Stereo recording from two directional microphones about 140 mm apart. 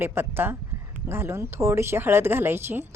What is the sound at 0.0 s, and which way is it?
Speech, 15° right (ahead or behind).